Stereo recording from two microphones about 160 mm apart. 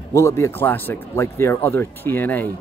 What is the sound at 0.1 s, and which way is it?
Speech, 20° left (ahead or behind).